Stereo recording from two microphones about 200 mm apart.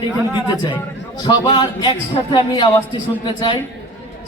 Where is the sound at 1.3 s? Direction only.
25° left (ahead or behind).